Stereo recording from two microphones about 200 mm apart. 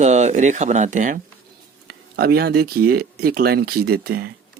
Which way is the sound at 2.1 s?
50° right (ahead or behind).